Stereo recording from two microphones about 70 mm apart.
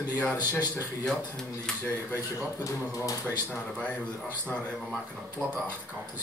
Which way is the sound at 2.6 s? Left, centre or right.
Left.